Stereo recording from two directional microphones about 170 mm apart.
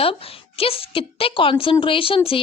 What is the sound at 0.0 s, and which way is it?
Speech, 35° left (ahead or behind).